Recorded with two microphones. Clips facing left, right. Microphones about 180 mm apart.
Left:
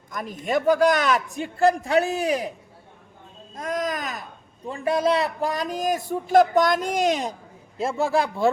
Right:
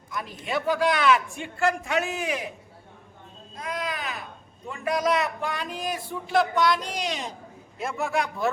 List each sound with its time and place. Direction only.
0.1 s a man's voice: 45° left (ahead or behind)
3.5 s a man's voice: 45° left (ahead or behind)
4.6 s a man's voice: 30° left (ahead or behind); by 7.3 s 45° left (ahead or behind)
7.8 s a man's voice: 30° left (ahead or behind)